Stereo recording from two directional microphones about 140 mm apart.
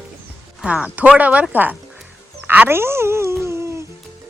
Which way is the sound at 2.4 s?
15° right (ahead or behind).